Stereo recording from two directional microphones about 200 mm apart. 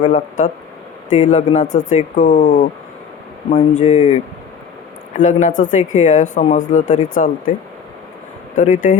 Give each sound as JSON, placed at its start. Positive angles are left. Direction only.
{"t": 0.0, "sound": "speech", "side_deg": 40}
{"t": 8.5, "sound": "speech", "side_deg": 40}